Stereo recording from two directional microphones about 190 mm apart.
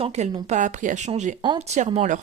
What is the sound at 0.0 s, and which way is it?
A woman's voice, 35° right (ahead or behind).